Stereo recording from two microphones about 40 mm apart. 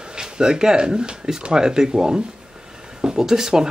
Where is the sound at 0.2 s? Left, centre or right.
Centre.